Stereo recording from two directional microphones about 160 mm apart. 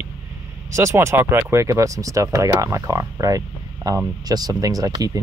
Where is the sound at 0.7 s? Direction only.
20° right (ahead or behind).